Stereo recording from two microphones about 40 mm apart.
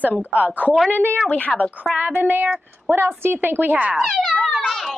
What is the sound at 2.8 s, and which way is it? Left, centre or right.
Speech, right.